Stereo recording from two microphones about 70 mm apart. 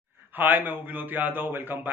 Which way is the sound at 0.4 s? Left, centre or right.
Right.